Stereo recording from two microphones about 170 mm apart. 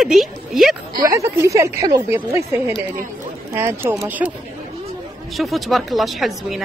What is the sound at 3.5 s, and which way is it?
Speech, 15° right (ahead or behind).